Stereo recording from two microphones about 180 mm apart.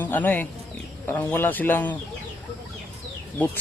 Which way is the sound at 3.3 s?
10° left (ahead or behind).